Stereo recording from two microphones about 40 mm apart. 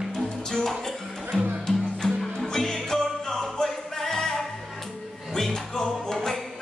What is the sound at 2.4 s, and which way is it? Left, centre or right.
Music, centre.